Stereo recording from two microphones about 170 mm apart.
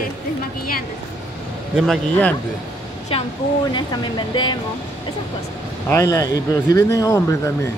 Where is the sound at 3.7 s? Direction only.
25° left (ahead or behind).